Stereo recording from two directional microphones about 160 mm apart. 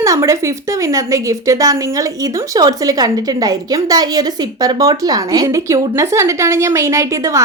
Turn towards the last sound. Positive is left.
turn(degrees=-20)  # may be behind; listen again after turning